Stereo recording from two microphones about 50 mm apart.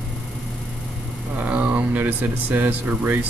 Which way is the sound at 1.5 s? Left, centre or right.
Right.